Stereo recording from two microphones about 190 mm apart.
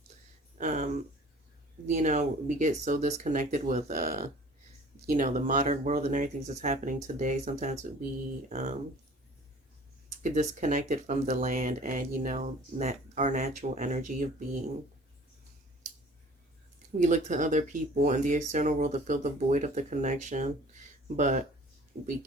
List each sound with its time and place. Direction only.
0.6 s speech: 40° right (ahead or behind)
10.1 s speech: 40° right (ahead or behind)
17.0 s speech: 40° right (ahead or behind)